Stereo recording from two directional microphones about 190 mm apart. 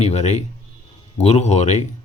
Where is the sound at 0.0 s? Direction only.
35° left (ahead or behind).